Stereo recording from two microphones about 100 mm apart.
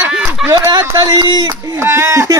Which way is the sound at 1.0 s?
45° right (ahead or behind).